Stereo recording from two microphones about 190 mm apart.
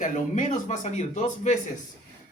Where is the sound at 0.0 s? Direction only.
40° left (ahead or behind).